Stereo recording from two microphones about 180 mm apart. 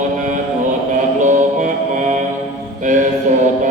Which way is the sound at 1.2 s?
45° right (ahead or behind).